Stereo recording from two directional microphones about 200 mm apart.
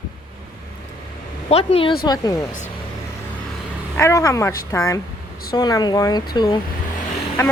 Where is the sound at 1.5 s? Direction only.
30° left (ahead or behind).